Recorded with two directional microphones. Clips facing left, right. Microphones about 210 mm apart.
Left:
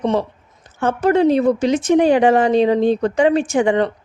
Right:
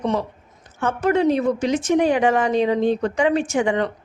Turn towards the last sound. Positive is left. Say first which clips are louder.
# left 4 dB
turn(degrees=35)  # may be behind; listen again after turning